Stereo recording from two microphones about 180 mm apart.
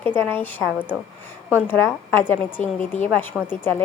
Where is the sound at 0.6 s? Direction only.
10° right (ahead or behind).